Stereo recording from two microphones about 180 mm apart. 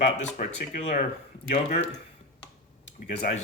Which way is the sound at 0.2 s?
45° left (ahead or behind).